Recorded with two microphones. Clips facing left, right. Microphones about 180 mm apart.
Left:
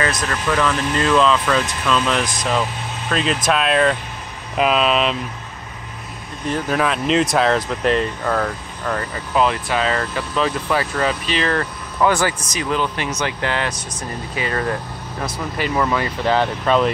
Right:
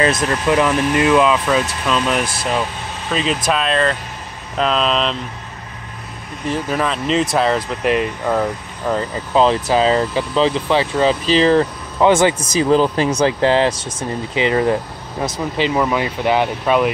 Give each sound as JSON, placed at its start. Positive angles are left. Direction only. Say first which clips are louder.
{"t": 0.0, "sound": "speech", "louder": "right 5 dB", "side_deg": -25}
{"t": 6.5, "sound": "speech", "louder": "even", "side_deg": 0}
{"t": 9.3, "sound": "speech", "louder": "right 4 dB", "side_deg": -30}
{"t": 12.6, "sound": "speech", "louder": "right 7 dB", "side_deg": -35}
{"t": 14.3, "sound": "speech", "louder": "right 7 dB", "side_deg": -20}